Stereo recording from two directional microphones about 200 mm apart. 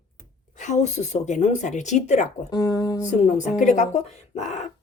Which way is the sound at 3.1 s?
35° left (ahead or behind).